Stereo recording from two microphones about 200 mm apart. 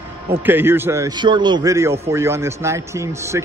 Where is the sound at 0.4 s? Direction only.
10° right (ahead or behind).